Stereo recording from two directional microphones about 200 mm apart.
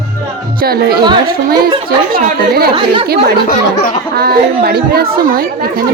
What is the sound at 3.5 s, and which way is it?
Speech, 45° left (ahead or behind).